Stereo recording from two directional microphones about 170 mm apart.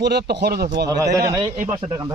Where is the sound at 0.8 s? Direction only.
20° right (ahead or behind).